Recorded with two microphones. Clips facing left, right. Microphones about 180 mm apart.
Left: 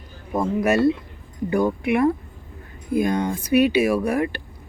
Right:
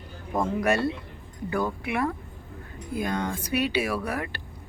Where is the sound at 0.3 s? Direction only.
10° left (ahead or behind).